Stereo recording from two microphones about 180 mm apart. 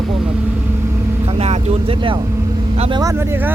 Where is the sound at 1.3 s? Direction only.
35° right (ahead or behind).